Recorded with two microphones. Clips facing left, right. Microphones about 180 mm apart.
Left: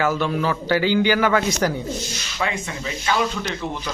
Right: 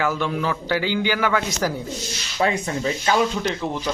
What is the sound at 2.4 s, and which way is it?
Speech, 40° right (ahead or behind).